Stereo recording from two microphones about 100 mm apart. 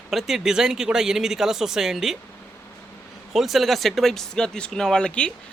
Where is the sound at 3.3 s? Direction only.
Centre (ahead or behind).